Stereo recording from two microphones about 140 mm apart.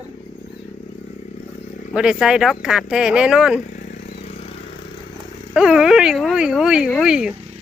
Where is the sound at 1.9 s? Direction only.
5° right (ahead or behind).